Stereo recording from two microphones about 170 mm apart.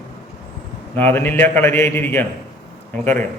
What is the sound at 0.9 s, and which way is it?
A man's voice, 10° left (ahead or behind).